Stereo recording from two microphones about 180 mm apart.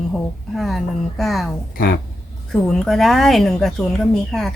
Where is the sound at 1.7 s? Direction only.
55° left (ahead or behind).